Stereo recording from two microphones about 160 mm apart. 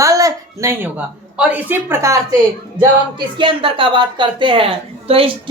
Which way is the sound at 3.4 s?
30° right (ahead or behind).